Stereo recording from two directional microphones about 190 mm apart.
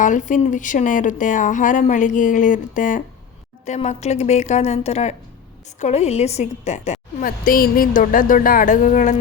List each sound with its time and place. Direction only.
0.0 s a woman's voice: 40° left (ahead or behind)